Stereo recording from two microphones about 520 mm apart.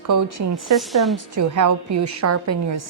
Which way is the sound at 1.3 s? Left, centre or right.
Right.